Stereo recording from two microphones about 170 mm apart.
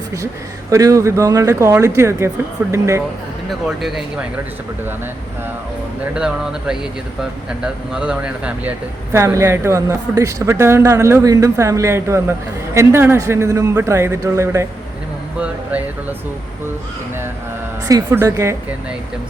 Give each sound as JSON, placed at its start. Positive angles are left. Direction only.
{"t": 0.7, "sound": "speech", "side_deg": -20}
{"t": 3.7, "sound": "speech", "side_deg": -5}
{"t": 6.1, "sound": "speech", "side_deg": -5}
{"t": 9.1, "sound": "speech", "side_deg": -20}
{"t": 17.8, "sound": "speech", "side_deg": -15}